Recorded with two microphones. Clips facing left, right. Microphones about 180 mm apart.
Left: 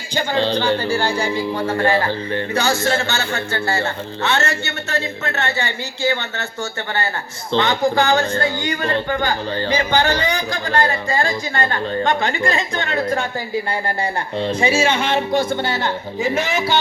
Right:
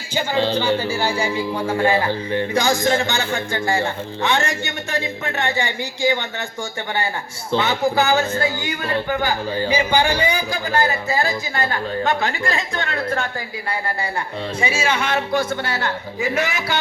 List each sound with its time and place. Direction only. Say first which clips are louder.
0.1 s speech: left 1 dB; 10° right (ahead or behind)
7.5 s speech: left 2 dB; 5° right (ahead or behind)
13.0 s a woman's voice: left 4 dB; 15° left (ahead or behind)
14.4 s a man's voice: left 5 dB; 35° left (ahead or behind)